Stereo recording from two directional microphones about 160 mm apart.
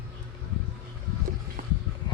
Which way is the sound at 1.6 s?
65° right (ahead or behind).